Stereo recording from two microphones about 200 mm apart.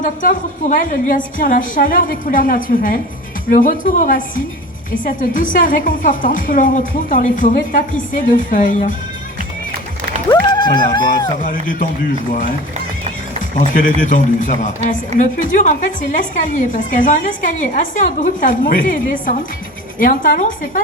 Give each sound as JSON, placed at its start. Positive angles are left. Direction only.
{"t": 0.0, "sound": "a woman's voice", "side_deg": 40}
{"t": 10.5, "sound": "speech", "side_deg": 20}
{"t": 11.4, "sound": "a woman's voice", "side_deg": 40}
{"t": 13.6, "sound": "a woman's voice", "side_deg": 40}